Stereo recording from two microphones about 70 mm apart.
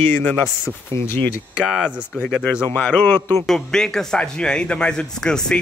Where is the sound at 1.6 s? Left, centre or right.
Centre.